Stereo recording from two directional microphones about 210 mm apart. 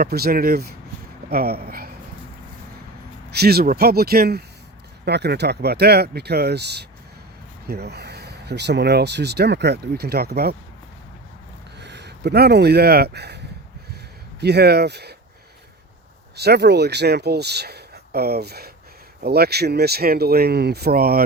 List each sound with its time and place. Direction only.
0.0 s speech: 45° right (ahead or behind)
3.2 s speech: 50° right (ahead or behind)
11.8 s speech: 55° right (ahead or behind)
14.4 s speech: 50° right (ahead or behind)
16.3 s speech: 50° right (ahead or behind)